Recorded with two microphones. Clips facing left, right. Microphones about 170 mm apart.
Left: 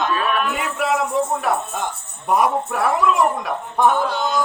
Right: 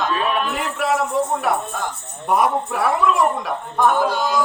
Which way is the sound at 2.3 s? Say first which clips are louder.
Even; centre (ahead or behind).